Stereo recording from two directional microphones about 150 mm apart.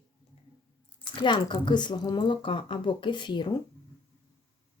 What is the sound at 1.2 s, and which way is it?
Speech, 30° left (ahead or behind).